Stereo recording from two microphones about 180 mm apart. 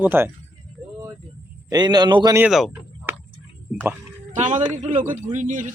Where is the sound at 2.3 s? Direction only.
5° right (ahead or behind).